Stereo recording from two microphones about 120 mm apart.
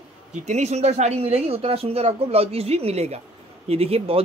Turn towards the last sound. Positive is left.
turn(degrees=-55)  # may be behind; listen again after turning